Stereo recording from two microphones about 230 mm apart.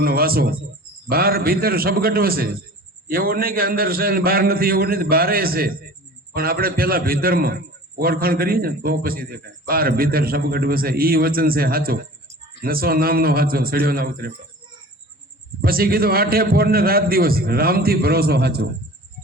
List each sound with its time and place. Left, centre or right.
0.0 s a man's voice: right
15.6 s a man's voice: right